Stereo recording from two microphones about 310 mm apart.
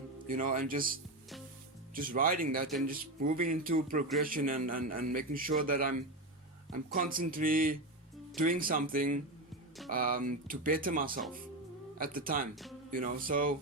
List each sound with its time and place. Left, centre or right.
0.3 s speech: right
2.0 s speech: right